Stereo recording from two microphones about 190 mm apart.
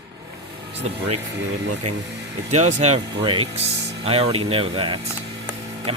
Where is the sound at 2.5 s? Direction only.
35° right (ahead or behind).